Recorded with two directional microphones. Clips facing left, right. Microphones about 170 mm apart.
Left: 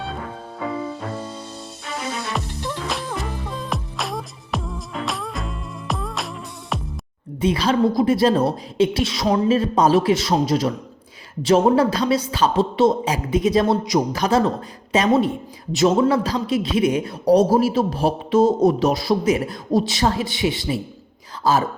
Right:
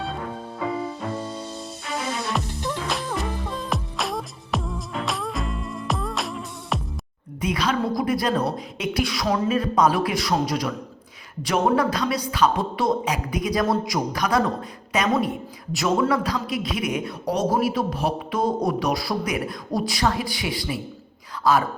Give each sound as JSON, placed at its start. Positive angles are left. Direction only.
{"t": 2.3, "sound": "music", "side_deg": 0}
{"t": 7.4, "sound": "a woman's voice", "side_deg": 30}